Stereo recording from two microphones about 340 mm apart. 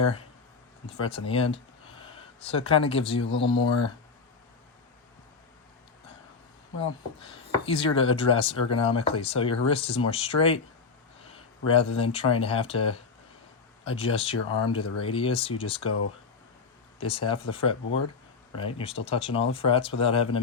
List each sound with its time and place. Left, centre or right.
0.9 s speech: centre
7.2 s speech: centre
11.9 s speech: centre
17.0 s speech: centre